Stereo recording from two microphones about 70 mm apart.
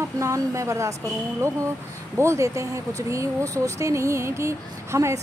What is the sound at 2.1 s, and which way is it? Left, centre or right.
Speech, right.